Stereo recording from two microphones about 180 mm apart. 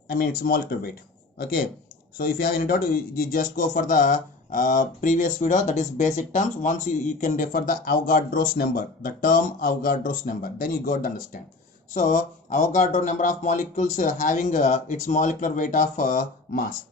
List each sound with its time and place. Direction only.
0.1 s speech: 55° left (ahead or behind)
2.1 s speech: 55° left (ahead or behind)